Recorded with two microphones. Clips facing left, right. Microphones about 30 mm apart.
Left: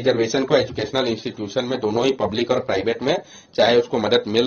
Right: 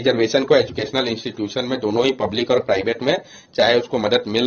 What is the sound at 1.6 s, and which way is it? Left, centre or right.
Speech, centre.